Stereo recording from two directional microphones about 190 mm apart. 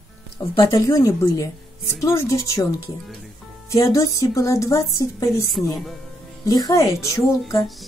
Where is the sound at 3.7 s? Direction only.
15° left (ahead or behind).